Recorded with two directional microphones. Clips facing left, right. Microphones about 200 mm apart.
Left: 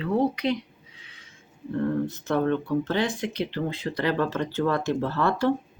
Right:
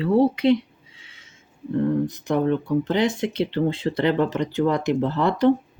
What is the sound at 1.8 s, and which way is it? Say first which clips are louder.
Speech: right 4 dB; 15° right (ahead or behind).